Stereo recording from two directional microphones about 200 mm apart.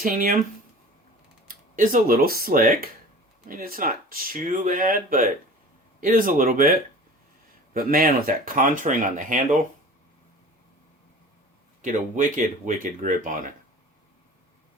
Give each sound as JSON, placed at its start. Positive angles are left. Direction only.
{"t": 0.0, "sound": "speech", "side_deg": -45}
{"t": 1.5, "sound": "speech", "side_deg": -40}
{"t": 11.8, "sound": "speech", "side_deg": -40}